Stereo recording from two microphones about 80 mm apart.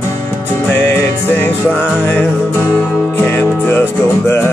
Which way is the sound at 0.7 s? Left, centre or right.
Left.